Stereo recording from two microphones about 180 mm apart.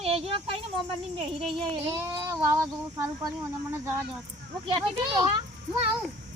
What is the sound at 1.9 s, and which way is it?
Speech, 10° right (ahead or behind).